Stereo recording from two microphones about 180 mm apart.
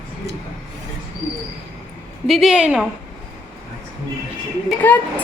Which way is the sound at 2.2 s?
Centre (ahead or behind).